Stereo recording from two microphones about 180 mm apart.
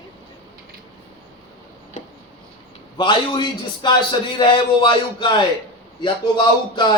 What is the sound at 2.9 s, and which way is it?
A man's voice, 25° left (ahead or behind).